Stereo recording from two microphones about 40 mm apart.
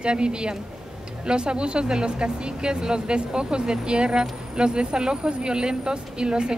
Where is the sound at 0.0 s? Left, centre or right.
Right.